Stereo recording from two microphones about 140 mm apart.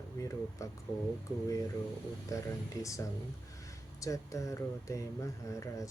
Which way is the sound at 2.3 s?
20° left (ahead or behind).